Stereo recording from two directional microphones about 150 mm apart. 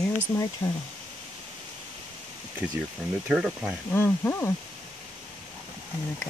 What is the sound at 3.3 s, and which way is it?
Speech, 10° right (ahead or behind).